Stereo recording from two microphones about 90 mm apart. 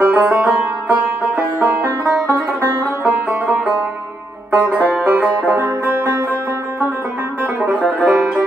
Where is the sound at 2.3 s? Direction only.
30° right (ahead or behind).